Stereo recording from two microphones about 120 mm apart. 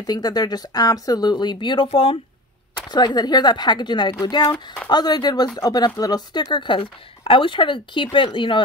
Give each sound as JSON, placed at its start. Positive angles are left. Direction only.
{"t": 0.0, "sound": "speech", "side_deg": 35}
{"t": 2.9, "sound": "speech", "side_deg": 35}